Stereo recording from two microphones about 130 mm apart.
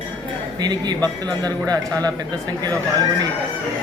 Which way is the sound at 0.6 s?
30° right (ahead or behind).